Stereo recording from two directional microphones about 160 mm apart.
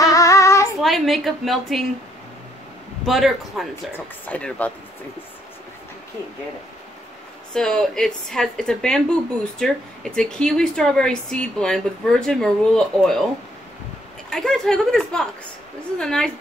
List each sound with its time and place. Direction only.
0.0 s child singing: 20° left (ahead or behind)
0.7 s speech: centre (ahead or behind)
3.1 s speech: centre (ahead or behind)
7.5 s speech: 5° left (ahead or behind)
14.3 s speech: 5° left (ahead or behind)